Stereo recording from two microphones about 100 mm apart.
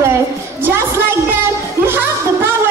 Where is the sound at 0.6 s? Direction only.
20° right (ahead or behind).